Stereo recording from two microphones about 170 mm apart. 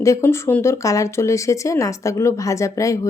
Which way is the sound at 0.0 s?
15° left (ahead or behind).